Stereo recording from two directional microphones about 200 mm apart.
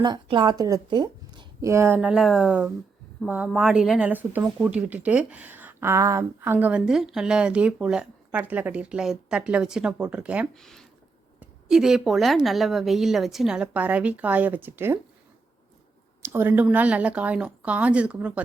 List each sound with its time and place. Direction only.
0.0 s a woman's voice: 25° right (ahead or behind)
16.2 s speech: 10° right (ahead or behind)